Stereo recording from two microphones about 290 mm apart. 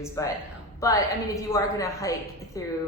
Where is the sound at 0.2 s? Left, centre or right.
Centre.